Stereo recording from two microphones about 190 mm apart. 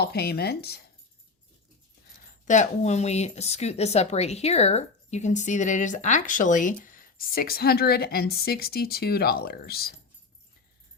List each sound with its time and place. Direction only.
0.0 s speech: 55° left (ahead or behind)
2.5 s speech: 40° left (ahead or behind); by 9.9 s 55° left (ahead or behind)